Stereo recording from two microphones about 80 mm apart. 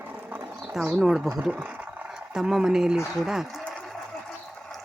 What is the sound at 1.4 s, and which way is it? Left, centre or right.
Speech, centre.